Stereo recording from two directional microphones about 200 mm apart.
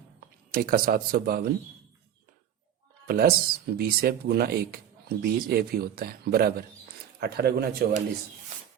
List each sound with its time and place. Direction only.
0.5 s speech: 50° right (ahead or behind)
3.1 s speech: 50° right (ahead or behind)